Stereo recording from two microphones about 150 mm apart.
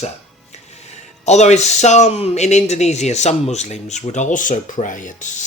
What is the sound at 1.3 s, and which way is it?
Speech, 50° left (ahead or behind).